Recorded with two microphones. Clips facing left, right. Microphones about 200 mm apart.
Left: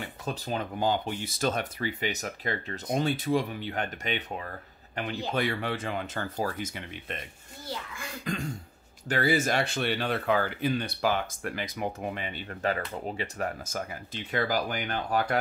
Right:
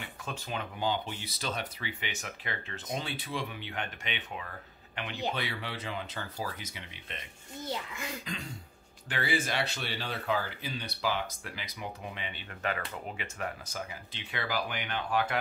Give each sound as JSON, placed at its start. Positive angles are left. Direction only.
{"t": 0.0, "sound": "speech", "side_deg": 40}
{"t": 7.6, "sound": "a child's voice", "side_deg": -20}
{"t": 9.1, "sound": "speech", "side_deg": 40}